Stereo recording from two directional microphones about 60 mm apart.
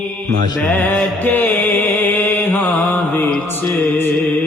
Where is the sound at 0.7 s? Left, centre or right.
Left.